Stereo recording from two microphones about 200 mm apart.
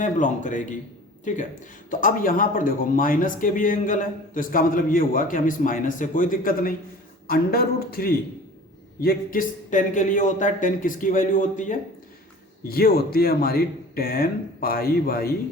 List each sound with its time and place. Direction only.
0.0 s speech: 40° left (ahead or behind)